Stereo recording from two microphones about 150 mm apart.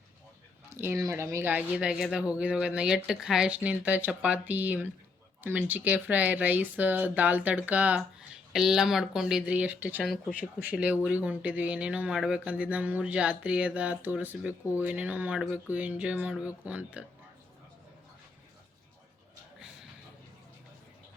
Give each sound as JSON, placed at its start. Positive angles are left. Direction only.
{"t": 0.7, "sound": "speech", "side_deg": -15}